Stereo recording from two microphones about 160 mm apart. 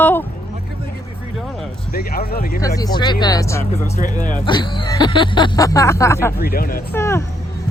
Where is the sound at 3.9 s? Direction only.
55° left (ahead or behind).